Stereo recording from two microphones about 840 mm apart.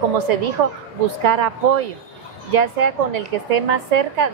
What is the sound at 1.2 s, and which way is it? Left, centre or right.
A woman's voice, right.